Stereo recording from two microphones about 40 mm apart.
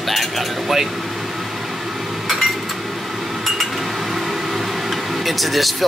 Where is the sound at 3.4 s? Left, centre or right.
Centre.